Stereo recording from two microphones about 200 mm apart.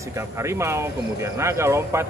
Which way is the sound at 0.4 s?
15° right (ahead or behind).